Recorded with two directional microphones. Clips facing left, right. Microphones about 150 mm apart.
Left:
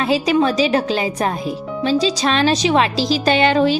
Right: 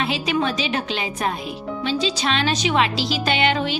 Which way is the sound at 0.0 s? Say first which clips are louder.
Left 6 dB; 40° left (ahead or behind).